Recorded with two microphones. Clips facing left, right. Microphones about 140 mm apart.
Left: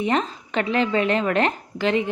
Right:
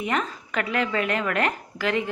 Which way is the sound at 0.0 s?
25° left (ahead or behind).